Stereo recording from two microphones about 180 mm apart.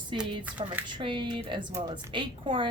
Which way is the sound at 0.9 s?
25° right (ahead or behind).